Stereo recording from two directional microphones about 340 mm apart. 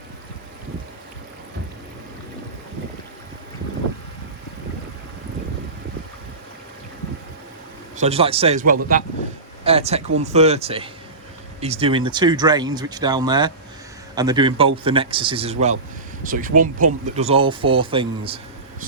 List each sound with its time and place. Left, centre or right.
7.9 s speech: centre